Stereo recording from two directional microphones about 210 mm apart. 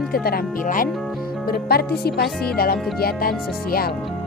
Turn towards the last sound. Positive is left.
turn(degrees=45)  # may be behind; listen again after turning